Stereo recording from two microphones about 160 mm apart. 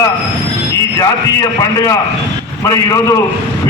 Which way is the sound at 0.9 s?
20° left (ahead or behind).